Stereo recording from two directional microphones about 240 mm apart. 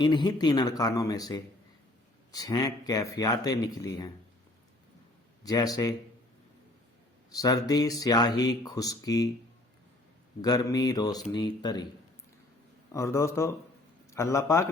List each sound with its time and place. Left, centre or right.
0.0 s speech: centre
5.5 s speech: centre
7.3 s speech: centre
10.4 s speech: centre
12.9 s speech: centre